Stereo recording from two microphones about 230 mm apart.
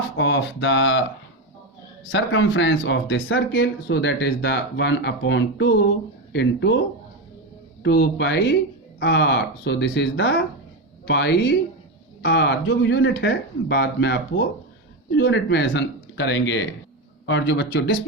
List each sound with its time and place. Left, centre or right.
0.2 s speech: left
2.1 s speech: left
7.8 s speech: left